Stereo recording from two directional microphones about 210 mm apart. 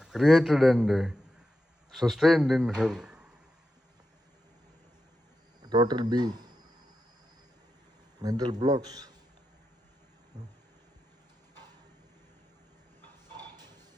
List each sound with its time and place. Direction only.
0.0 s a man's voice: centre (ahead or behind)
5.6 s speech: 20° right (ahead or behind)
8.2 s a man's voice: 20° right (ahead or behind)
10.3 s speech: 20° right (ahead or behind)